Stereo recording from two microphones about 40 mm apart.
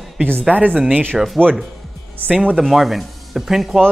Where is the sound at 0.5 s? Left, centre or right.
Right.